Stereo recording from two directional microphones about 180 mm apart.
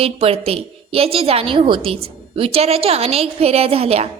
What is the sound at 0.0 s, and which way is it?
A woman's voice, 35° right (ahead or behind).